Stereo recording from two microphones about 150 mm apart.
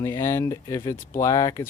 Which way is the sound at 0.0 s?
20° left (ahead or behind).